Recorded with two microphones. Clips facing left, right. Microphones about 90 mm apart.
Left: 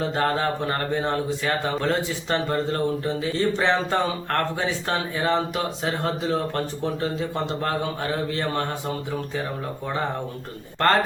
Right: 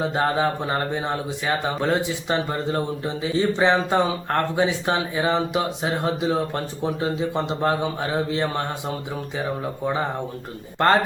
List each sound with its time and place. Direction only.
0.0 s speech: 15° right (ahead or behind)
10.8 s speech: 20° right (ahead or behind)